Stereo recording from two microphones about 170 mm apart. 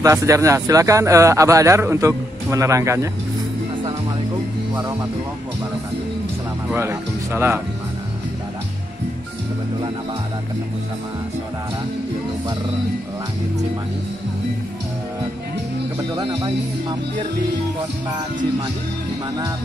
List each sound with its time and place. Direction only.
0.0 s speech: 20° right (ahead or behind)
6.7 s speech: 15° right (ahead or behind)
16.2 s speech: 25° right (ahead or behind)